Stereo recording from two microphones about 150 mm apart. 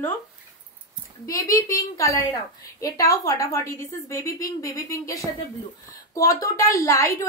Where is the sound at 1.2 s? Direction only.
20° left (ahead or behind).